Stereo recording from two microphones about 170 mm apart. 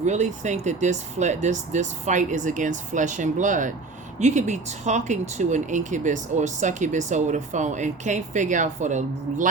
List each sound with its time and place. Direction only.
0.0 s speech: 45° right (ahead or behind)